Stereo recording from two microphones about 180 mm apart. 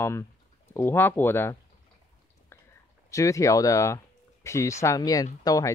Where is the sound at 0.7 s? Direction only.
10° left (ahead or behind).